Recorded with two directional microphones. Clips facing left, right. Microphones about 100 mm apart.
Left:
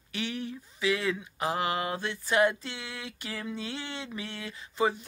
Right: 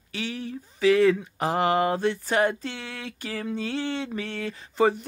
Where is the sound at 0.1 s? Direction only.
35° right (ahead or behind).